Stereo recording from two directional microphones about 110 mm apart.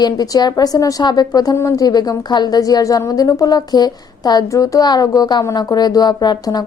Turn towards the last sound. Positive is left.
turn(degrees=35)  # may be behind; listen again after turning